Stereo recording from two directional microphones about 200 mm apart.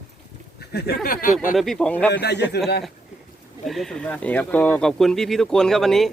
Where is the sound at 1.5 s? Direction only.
Centre (ahead or behind).